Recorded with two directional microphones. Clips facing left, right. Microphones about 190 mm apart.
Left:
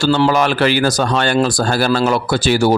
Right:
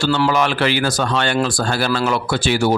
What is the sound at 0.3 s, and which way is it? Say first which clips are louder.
Speech: left 3 dB; 40° left (ahead or behind).